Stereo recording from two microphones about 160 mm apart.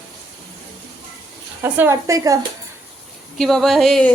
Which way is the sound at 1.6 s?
15° right (ahead or behind).